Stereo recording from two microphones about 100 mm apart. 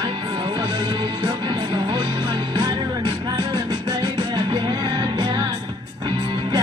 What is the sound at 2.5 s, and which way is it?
Music, 50° right (ahead or behind).